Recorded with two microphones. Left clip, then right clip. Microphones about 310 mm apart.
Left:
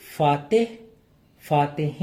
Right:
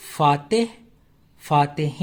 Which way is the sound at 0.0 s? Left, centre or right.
Right.